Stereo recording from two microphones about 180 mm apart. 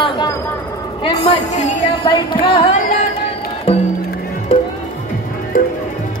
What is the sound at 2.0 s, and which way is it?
Music, 25° left (ahead or behind).